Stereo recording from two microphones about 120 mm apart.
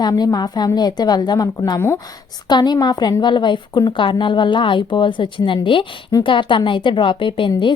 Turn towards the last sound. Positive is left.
turn(degrees=40)  # may be behind; listen again after turning